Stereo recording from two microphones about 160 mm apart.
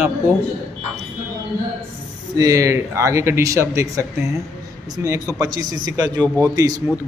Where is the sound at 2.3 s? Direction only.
20° right (ahead or behind).